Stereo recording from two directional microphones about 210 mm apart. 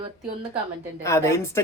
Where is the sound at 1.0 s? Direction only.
15° left (ahead or behind).